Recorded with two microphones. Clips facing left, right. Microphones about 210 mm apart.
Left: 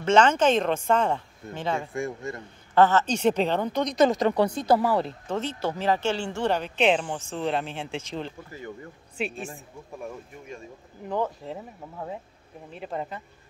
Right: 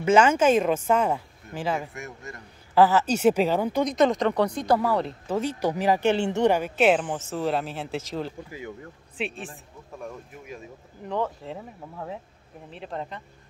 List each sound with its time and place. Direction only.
0.0 s speech: 10° right (ahead or behind)
1.8 s speech: 25° left (ahead or behind)
2.7 s speech: 5° right (ahead or behind)
5.3 s speech: 10° right (ahead or behind)